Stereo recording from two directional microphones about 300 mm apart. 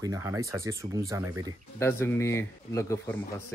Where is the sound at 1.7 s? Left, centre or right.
Centre.